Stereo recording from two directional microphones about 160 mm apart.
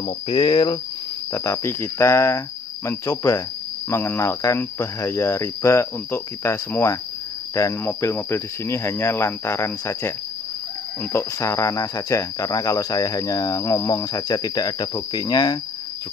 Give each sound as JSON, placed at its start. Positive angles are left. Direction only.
{"t": 0.0, "sound": "speech", "side_deg": 30}
{"t": 1.3, "sound": "speech", "side_deg": 20}
{"t": 11.1, "sound": "speech", "side_deg": 20}